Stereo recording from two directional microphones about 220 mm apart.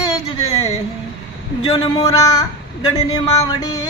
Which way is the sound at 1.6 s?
20° left (ahead or behind).